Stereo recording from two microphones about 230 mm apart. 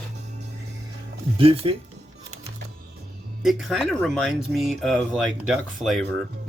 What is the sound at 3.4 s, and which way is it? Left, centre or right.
Speech, centre.